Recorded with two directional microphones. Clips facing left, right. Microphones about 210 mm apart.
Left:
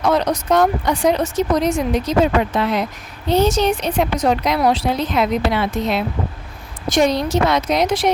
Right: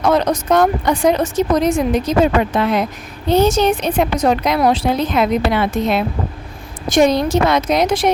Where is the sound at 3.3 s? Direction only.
50° right (ahead or behind).